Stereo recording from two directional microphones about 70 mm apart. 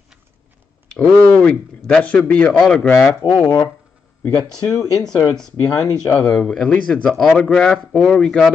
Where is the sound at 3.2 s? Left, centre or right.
Left.